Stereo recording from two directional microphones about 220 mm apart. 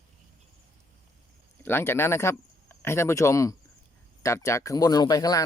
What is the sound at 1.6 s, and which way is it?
Speech, 10° left (ahead or behind).